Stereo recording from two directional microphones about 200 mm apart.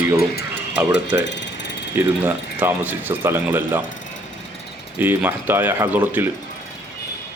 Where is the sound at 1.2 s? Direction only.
60° left (ahead or behind).